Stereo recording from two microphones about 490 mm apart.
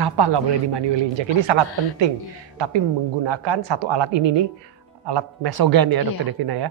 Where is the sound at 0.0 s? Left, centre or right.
Right.